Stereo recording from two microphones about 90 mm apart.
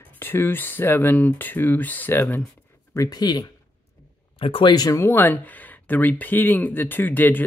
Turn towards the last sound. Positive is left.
turn(degrees=20)  # may be behind; listen again after turning